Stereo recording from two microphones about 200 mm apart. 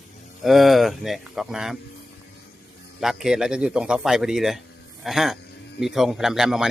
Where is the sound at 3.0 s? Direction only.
Centre (ahead or behind).